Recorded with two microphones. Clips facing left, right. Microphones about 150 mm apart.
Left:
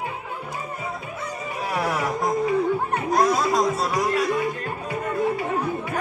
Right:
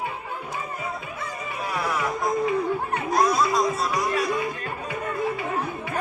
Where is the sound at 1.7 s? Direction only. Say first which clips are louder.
Left 2 dB; 55° left (ahead or behind).